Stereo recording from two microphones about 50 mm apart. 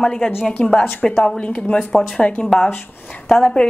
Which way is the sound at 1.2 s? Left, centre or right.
Centre.